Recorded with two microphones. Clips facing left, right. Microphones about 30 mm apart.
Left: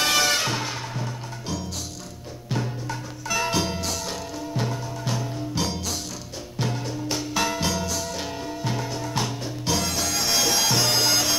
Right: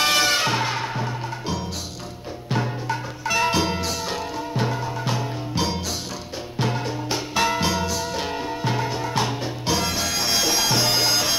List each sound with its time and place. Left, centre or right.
0.0 s music: centre
2.5 s music: right